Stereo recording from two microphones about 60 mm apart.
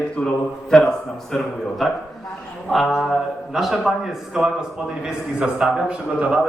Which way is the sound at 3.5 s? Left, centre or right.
Centre.